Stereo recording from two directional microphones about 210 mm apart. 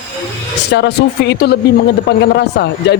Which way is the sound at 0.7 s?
55° left (ahead or behind).